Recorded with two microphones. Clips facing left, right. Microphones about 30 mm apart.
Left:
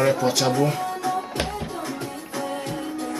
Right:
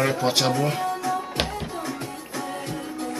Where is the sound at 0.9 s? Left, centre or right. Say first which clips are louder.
Even; centre.